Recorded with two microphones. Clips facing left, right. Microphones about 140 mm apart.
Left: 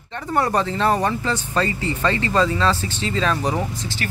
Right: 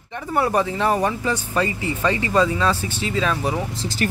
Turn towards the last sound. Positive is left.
turn(degrees=-5)  # may be behind; listen again after turning